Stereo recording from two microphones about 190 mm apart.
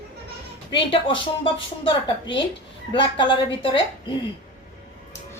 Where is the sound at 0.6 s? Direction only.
25° left (ahead or behind).